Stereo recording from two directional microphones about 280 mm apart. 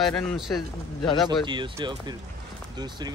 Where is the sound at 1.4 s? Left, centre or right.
Centre.